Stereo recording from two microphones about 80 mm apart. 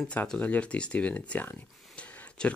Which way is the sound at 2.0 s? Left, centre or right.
Centre.